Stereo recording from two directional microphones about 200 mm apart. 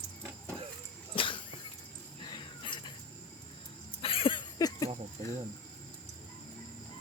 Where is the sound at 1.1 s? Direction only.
25° left (ahead or behind).